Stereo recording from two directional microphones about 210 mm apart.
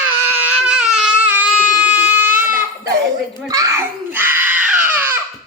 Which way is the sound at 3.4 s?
15° right (ahead or behind).